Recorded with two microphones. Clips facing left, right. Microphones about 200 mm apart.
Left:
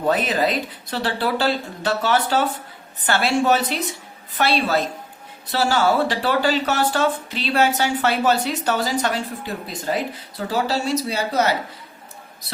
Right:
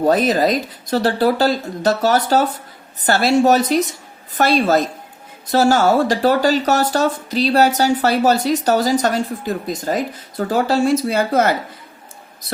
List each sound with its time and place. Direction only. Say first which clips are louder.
0.0 s speech: right 5 dB; 40° right (ahead or behind)